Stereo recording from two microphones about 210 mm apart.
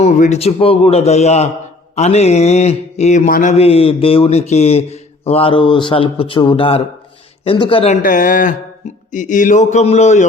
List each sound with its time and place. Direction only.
0.0 s a man's voice: 35° left (ahead or behind)
8.0 s a man's voice: 40° left (ahead or behind)